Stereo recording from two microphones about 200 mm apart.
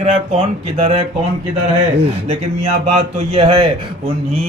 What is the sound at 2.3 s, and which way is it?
Speech, 35° right (ahead or behind).